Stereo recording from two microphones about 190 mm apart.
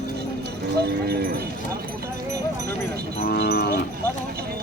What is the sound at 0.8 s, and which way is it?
Speech, 55° right (ahead or behind).